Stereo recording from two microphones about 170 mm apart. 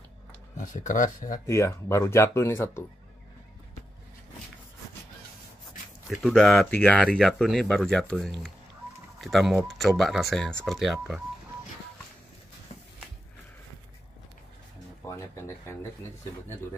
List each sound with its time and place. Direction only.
0.6 s speech: 50° left (ahead or behind)
1.4 s speech: 15° left (ahead or behind)
6.0 s speech: centre (ahead or behind)
15.0 s a sound: 15° left (ahead or behind)